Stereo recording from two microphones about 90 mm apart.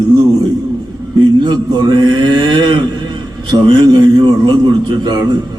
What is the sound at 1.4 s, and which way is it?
A man's voice, 55° right (ahead or behind).